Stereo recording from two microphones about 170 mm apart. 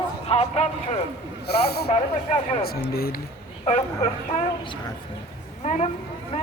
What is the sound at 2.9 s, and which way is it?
Speech, 65° left (ahead or behind).